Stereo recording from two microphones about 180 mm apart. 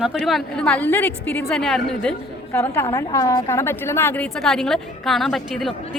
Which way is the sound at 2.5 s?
15° left (ahead or behind).